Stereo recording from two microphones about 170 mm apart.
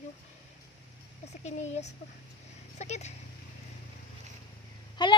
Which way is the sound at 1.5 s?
40° left (ahead or behind).